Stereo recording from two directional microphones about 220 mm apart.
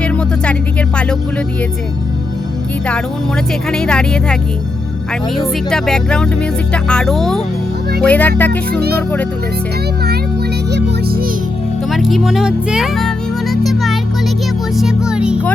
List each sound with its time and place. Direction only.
0.0 s music: 5° left (ahead or behind)
3.7 s speech: 5° left (ahead or behind)
5.7 s speech: 5° left (ahead or behind)
10.7 s music: 45° right (ahead or behind)
11.9 s speech: centre (ahead or behind)
14.8 s music: 5° right (ahead or behind)